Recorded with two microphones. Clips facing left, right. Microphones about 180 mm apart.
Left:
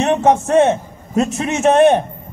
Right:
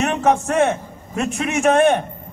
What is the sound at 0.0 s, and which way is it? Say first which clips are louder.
A man's voice: left 4 dB; 25° left (ahead or behind).